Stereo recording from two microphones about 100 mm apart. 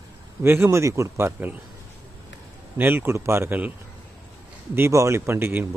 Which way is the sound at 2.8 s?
20° right (ahead or behind).